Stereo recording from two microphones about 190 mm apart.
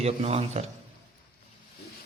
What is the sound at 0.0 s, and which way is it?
Speech, 35° right (ahead or behind).